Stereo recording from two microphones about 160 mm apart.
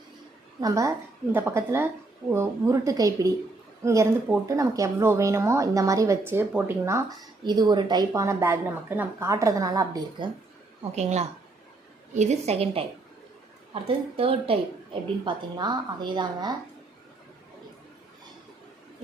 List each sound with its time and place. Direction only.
0.6 s a woman's voice: 20° right (ahead or behind)
7.4 s a woman's voice: 25° right (ahead or behind)
10.9 s a woman's voice: 45° right (ahead or behind)
13.8 s a woman's voice: 35° right (ahead or behind)